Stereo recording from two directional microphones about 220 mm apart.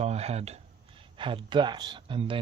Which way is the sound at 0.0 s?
30° right (ahead or behind).